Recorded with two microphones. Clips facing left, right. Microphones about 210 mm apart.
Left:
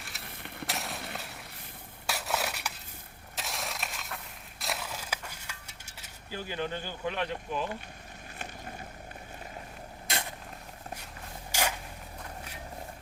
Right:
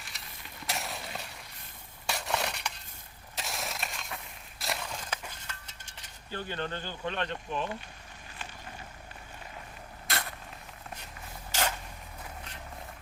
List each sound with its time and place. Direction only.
0.2 s a sound: 60° left (ahead or behind)
0.7 s a sound: centre (ahead or behind)
2.0 s crushing: 5° left (ahead or behind)
5.3 s cutlery: 10° left (ahead or behind)
10.1 s vehicle: 15° left (ahead or behind)
11.5 s vehicle: 10° left (ahead or behind)